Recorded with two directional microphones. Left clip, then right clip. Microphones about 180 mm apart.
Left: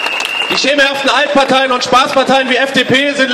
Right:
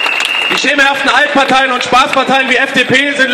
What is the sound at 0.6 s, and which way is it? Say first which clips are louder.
A man's voice: right 1 dB; 55° left (ahead or behind).